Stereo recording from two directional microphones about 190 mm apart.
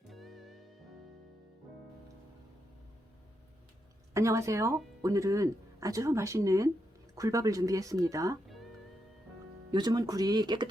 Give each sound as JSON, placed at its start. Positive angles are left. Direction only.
{"t": 0.1, "sound": "music", "side_deg": 0}
{"t": 4.1, "sound": "speech", "side_deg": -15}
{"t": 8.4, "sound": "music", "side_deg": 0}
{"t": 9.7, "sound": "speech", "side_deg": -20}